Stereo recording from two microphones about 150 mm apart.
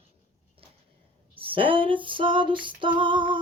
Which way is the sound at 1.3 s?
35° right (ahead or behind).